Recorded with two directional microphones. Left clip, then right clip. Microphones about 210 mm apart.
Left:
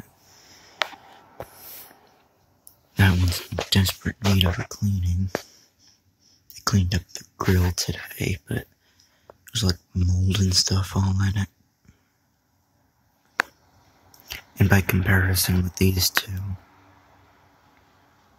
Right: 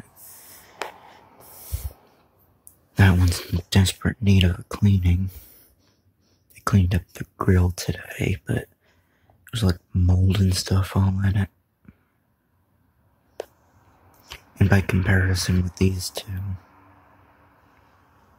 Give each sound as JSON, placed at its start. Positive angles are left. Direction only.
{"t": 0.5, "sound": "a sound", "side_deg": 0}
{"t": 3.0, "sound": "speech", "side_deg": -10}
{"t": 6.6, "sound": "speech", "side_deg": -10}
{"t": 14.2, "sound": "speech", "side_deg": 0}